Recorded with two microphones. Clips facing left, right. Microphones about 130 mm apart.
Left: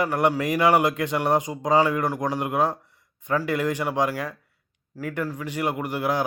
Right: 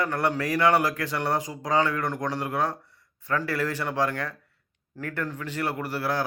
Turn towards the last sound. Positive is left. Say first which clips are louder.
# left 3 dB
turn(degrees=15)  # may be behind; listen again after turning